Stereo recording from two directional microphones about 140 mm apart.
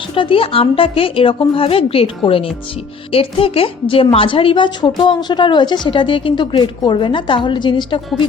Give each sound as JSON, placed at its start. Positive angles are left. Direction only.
{"t": 0.1, "sound": "a woman's voice", "side_deg": 40}